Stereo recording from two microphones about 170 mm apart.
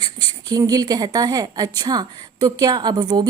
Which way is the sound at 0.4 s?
20° right (ahead or behind).